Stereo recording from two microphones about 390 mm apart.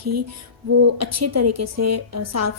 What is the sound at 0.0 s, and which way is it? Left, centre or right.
A woman's voice, right.